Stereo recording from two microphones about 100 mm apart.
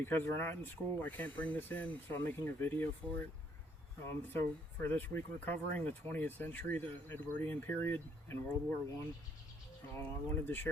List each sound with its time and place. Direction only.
0.0 s speech: 20° left (ahead or behind)
4.0 s speech: 20° left (ahead or behind)
10.0 s speech: 20° left (ahead or behind)